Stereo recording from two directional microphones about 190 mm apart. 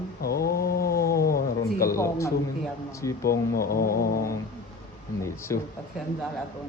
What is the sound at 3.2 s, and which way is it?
Cat, 50° left (ahead or behind).